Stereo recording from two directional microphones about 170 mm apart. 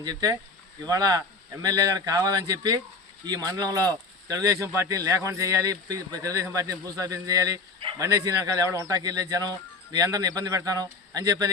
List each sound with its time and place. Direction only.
0.0 s speech: 25° right (ahead or behind)